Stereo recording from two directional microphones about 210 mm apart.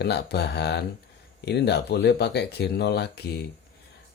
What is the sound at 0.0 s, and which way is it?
Speech, 50° left (ahead or behind).